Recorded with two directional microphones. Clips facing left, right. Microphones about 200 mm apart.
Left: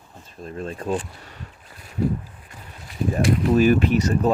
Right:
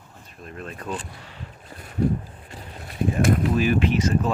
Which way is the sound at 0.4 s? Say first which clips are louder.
Left 5 dB; 30° left (ahead or behind).